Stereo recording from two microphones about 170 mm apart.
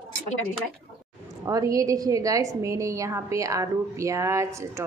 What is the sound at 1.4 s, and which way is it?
A woman's voice, 20° right (ahead or behind).